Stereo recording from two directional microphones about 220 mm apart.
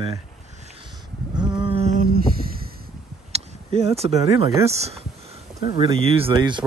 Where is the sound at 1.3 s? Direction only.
20° right (ahead or behind).